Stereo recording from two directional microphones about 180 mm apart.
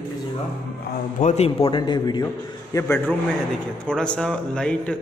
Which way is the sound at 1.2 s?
35° left (ahead or behind).